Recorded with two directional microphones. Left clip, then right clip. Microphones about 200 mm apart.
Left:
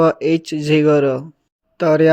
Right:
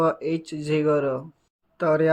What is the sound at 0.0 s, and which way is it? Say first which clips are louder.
Speech: left 8 dB; 35° left (ahead or behind).